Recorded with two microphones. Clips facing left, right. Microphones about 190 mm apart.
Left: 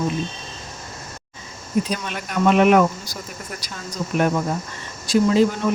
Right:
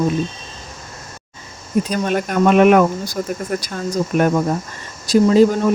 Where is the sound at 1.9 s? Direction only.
45° right (ahead or behind).